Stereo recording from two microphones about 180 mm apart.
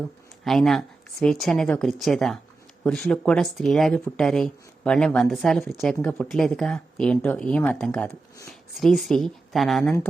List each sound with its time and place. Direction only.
0.4 s speech: centre (ahead or behind)